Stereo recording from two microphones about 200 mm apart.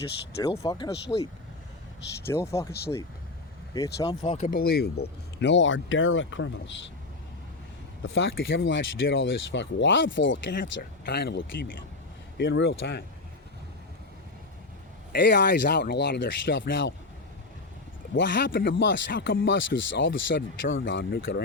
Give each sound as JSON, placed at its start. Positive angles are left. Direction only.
{"t": 0.4, "sound": "speech", "side_deg": 15}
{"t": 2.2, "sound": "speech", "side_deg": 15}
{"t": 3.8, "sound": "speech", "side_deg": 15}
{"t": 4.4, "sound": "speech", "side_deg": 45}
{"t": 8.0, "sound": "speech", "side_deg": 75}
{"t": 15.1, "sound": "speech", "side_deg": 60}
{"t": 18.1, "sound": "speech", "side_deg": 60}